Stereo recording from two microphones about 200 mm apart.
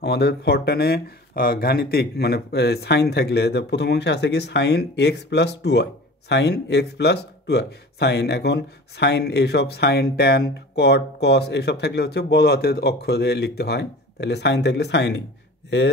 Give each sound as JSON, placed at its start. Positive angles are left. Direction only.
{"t": 0.0, "sound": "speech", "side_deg": 55}